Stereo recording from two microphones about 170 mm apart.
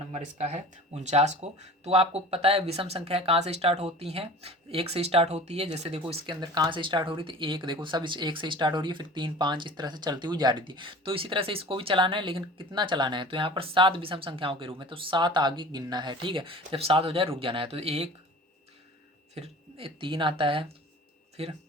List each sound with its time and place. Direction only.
0.1 s speech: 40° right (ahead or behind)
19.3 s speech: 35° right (ahead or behind)